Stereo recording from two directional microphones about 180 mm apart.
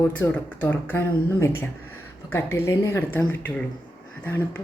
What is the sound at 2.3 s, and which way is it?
Speech, 15° left (ahead or behind).